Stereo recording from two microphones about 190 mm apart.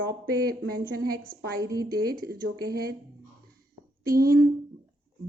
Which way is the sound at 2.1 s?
50° right (ahead or behind).